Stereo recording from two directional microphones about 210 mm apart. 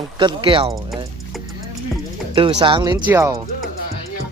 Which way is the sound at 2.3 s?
25° right (ahead or behind).